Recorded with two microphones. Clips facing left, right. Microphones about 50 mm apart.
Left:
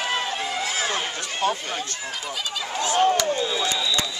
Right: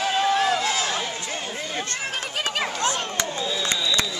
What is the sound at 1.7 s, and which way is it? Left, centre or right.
Speech, right.